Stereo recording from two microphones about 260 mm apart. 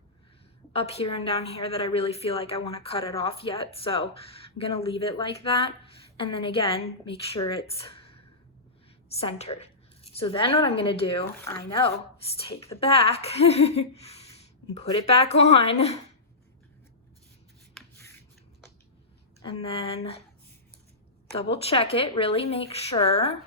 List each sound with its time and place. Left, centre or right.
0.7 s a woman's voice: left
9.1 s a woman's voice: left
12.5 s a woman's voice: left
17.7 s rub: centre
19.4 s a woman's voice: left
21.5 s a woman's voice: left